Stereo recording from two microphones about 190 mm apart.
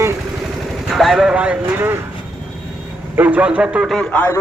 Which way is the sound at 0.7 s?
Centre (ahead or behind).